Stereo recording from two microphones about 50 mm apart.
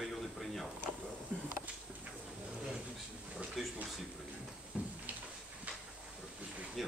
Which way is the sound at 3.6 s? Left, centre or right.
Centre.